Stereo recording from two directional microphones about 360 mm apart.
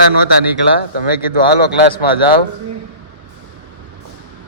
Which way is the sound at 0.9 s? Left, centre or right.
Left.